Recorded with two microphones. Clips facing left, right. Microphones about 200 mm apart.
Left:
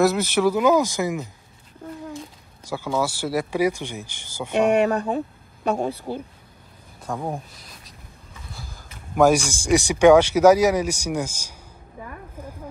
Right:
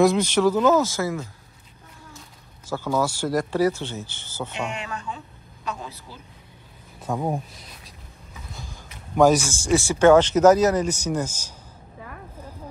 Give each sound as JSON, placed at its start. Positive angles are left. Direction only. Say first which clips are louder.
{"t": 0.0, "sound": "speech", "louder": "right 1 dB", "side_deg": 5}
{"t": 3.0, "sound": "speech", "louder": "even", "side_deg": 10}
{"t": 4.5, "sound": "speech", "louder": "left 16 dB", "side_deg": 55}
{"t": 7.1, "sound": "speech", "louder": "right 3 dB", "side_deg": -5}
{"t": 9.1, "sound": "speech", "louder": "even", "side_deg": 10}